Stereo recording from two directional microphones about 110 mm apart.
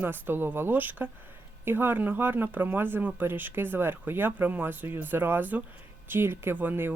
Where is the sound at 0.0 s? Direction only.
20° right (ahead or behind).